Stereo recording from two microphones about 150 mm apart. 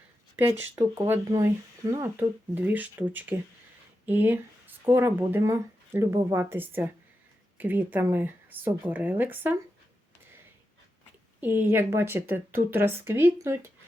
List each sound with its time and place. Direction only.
0.6 s speech: 15° right (ahead or behind)
11.3 s speech: 15° right (ahead or behind)